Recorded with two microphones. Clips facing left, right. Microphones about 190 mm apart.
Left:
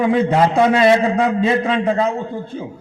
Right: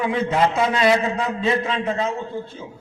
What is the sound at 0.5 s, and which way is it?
Speech, 55° left (ahead or behind).